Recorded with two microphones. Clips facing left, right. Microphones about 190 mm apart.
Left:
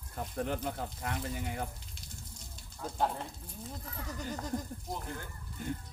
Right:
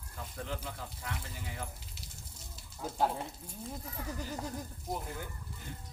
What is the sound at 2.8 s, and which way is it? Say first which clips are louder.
Speech: right 1 dB; 5° right (ahead or behind).